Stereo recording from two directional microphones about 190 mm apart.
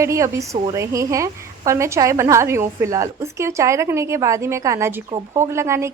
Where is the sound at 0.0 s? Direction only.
15° right (ahead or behind).